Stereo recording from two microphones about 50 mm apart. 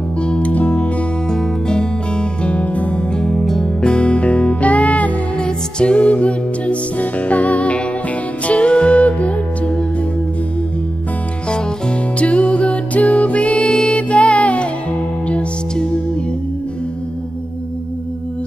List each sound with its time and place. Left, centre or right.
0.2 s music: left
1.3 s music: centre
11.4 s music: left
13.7 s music: centre
14.0 s music: left